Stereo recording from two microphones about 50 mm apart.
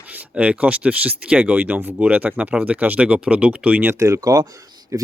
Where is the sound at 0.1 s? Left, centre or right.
Right.